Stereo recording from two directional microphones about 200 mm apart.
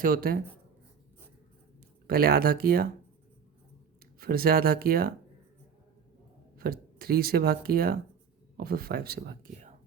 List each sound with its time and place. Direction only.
0.0 s speech: 45° right (ahead or behind)
2.0 s speech: 50° right (ahead or behind)
4.2 s speech: 50° right (ahead or behind)
6.6 s speech: 50° right (ahead or behind)